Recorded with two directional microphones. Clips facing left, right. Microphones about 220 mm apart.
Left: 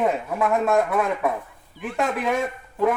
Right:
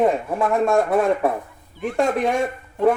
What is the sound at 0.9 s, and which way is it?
Speech, 35° right (ahead or behind).